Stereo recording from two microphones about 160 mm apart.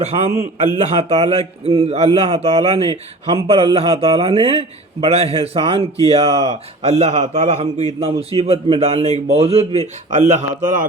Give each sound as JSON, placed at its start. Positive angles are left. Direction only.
{"t": 0.8, "sound": "a man's voice", "side_deg": -45}